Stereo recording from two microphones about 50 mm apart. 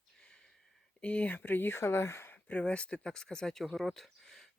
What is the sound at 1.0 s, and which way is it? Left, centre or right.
Speech, left.